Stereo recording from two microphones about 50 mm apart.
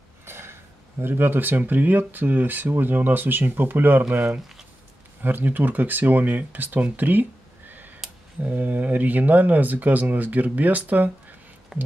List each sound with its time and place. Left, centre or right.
0.2 s a sound: right
1.6 s speech: right
5.2 s speech: right
7.0 s a sound: right
8.4 s speech: right
11.7 s speech: centre